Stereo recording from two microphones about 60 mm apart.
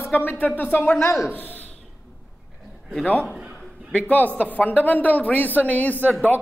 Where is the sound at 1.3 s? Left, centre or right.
Left.